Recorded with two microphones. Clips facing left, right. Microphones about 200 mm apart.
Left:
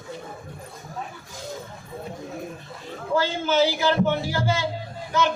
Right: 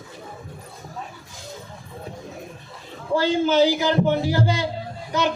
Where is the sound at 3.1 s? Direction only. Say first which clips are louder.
Right 4 dB; 15° right (ahead or behind).